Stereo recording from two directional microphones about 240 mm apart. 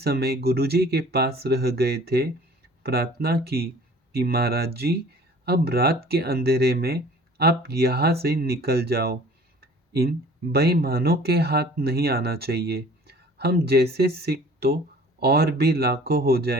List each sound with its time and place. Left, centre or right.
0.0 s speech: right